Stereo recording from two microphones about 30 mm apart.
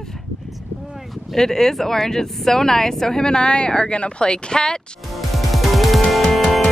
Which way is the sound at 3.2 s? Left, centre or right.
Left.